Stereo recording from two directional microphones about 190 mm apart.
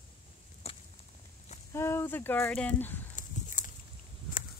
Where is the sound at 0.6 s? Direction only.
35° left (ahead or behind).